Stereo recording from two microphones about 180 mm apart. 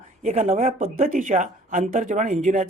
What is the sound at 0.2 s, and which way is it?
Speech, 40° right (ahead or behind).